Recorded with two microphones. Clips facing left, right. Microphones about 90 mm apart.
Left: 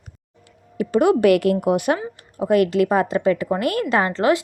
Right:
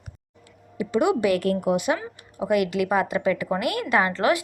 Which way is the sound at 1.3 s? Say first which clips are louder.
Left 5 dB; 80° left.